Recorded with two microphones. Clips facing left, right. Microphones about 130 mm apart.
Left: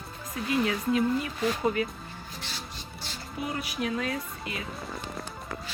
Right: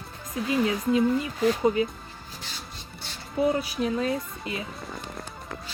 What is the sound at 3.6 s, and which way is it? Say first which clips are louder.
Speech: right 4 dB; 30° right (ahead or behind).